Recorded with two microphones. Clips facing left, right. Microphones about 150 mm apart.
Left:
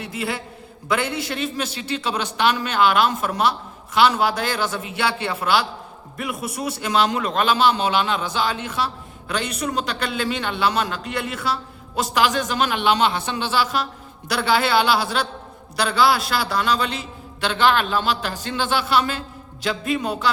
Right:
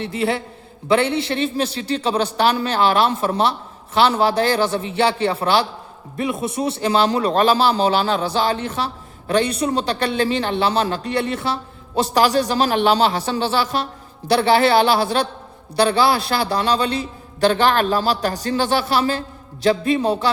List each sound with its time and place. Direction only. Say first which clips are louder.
0.9 s a man's voice: right 6 dB; 30° right (ahead or behind)